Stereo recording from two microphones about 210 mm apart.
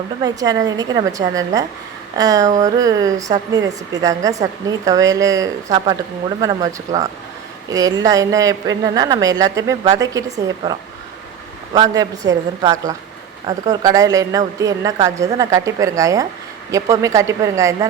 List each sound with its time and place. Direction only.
0.2 s speech: 15° right (ahead or behind)
11.7 s speech: 15° right (ahead or behind)